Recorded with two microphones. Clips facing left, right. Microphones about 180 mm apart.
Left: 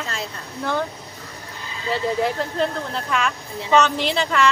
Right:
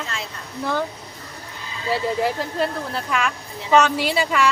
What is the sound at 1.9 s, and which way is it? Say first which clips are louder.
Speech: even; 5° right (ahead or behind).